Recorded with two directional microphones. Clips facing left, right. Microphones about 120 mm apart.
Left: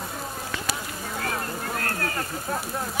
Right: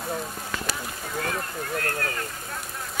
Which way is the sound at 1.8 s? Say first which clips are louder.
Even; 35° left (ahead or behind).